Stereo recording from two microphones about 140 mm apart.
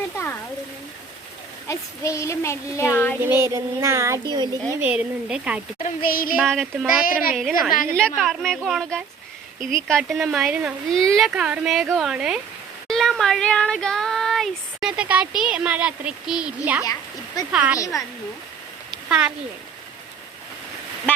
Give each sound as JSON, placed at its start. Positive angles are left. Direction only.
{"t": 1.6, "sound": "speech", "side_deg": 20}
{"t": 3.2, "sound": "speech", "side_deg": -15}
{"t": 4.7, "sound": "speech", "side_deg": -10}
{"t": 6.1, "sound": "a sound", "side_deg": 90}
{"t": 6.3, "sound": "a woman's voice", "side_deg": 0}
{"t": 10.9, "sound": "a woman's voice", "side_deg": 5}
{"t": 16.8, "sound": "speech", "side_deg": 25}
{"t": 17.5, "sound": "speech", "side_deg": -10}
{"t": 17.7, "sound": "speech", "side_deg": 25}
{"t": 19.0, "sound": "speech", "side_deg": -5}